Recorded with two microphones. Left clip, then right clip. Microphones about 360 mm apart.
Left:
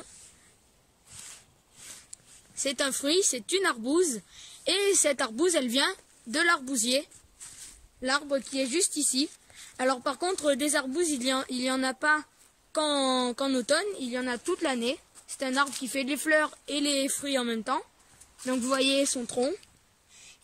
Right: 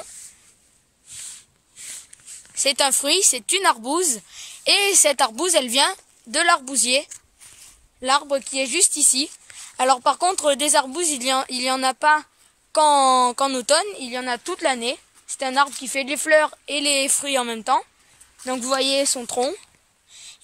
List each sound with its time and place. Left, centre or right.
2.5 s speech: centre